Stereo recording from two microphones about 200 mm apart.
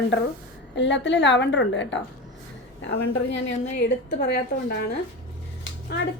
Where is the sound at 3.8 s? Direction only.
55° left (ahead or behind).